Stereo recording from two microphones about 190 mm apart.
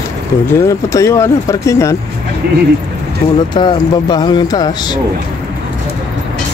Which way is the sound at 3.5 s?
25° left (ahead or behind).